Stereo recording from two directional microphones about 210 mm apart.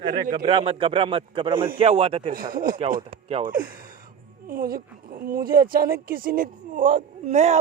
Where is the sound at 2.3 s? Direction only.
45° right (ahead or behind).